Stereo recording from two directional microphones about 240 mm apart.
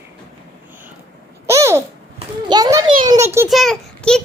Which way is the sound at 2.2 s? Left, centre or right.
Centre.